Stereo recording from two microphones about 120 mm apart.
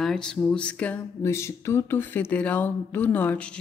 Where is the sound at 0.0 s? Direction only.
5° left (ahead or behind).